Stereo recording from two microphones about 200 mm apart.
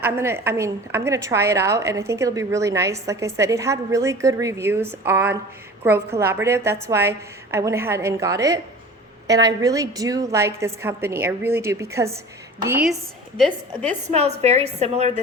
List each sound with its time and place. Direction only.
0.0 s a woman's voice: 10° right (ahead or behind)
14.1 s a woman's voice: 30° right (ahead or behind)